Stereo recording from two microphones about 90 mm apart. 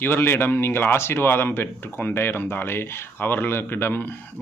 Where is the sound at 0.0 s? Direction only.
25° left (ahead or behind).